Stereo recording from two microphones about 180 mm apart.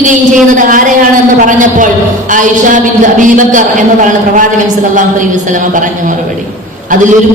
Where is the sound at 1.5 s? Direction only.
45° right (ahead or behind).